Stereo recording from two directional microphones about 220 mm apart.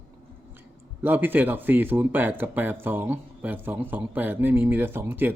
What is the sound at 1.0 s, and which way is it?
Speech, 10° right (ahead or behind).